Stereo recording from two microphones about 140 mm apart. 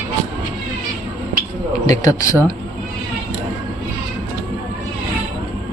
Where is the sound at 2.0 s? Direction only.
25° left (ahead or behind).